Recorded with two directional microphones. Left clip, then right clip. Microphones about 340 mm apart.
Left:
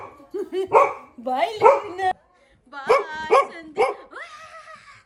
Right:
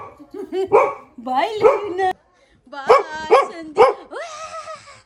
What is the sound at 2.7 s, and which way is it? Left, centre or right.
Dog, centre.